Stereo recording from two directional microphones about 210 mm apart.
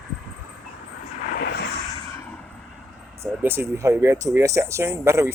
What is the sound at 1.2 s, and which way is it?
Vehicle, 45° left (ahead or behind).